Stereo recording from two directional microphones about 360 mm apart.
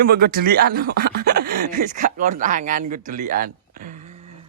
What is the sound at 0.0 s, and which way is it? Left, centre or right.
Speech, right.